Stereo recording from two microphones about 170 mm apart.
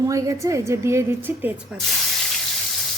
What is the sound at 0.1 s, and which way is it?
A woman's voice, 20° right (ahead or behind).